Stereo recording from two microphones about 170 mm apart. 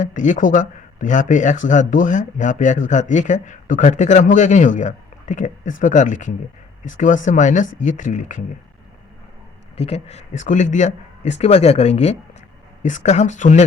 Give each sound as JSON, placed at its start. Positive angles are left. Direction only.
{"t": 0.0, "sound": "speech", "side_deg": 45}
{"t": 9.7, "sound": "speech", "side_deg": 40}